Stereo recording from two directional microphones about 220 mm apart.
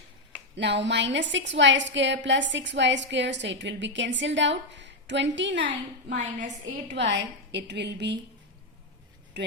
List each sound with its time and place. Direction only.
0.5 s a woman's voice: 50° right (ahead or behind)
5.6 s a woman's voice: 35° right (ahead or behind)
6.9 s a woman's voice: 55° right (ahead or behind)